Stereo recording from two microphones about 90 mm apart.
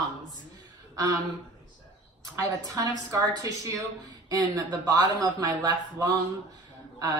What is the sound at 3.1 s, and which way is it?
A woman's voice, 35° right (ahead or behind).